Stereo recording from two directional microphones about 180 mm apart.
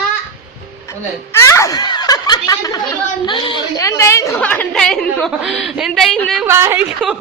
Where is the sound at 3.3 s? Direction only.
25° left (ahead or behind).